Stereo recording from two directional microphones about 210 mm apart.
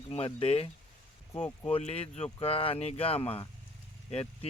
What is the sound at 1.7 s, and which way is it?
Speech, 30° left (ahead or behind).